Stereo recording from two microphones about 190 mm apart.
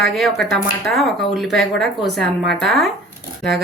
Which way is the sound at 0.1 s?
Centre (ahead or behind).